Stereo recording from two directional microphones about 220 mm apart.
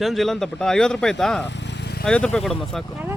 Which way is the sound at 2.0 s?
5° left (ahead or behind).